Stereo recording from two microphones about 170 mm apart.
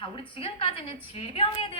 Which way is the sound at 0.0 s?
30° left (ahead or behind).